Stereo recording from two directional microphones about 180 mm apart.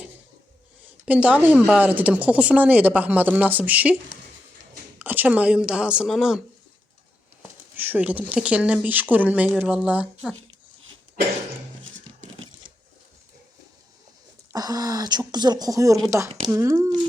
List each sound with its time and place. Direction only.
1.0 s speech: 10° right (ahead or behind)
4.9 s speech: 10° right (ahead or behind)
7.8 s speech: 10° right (ahead or behind)
14.5 s speech: 20° right (ahead or behind)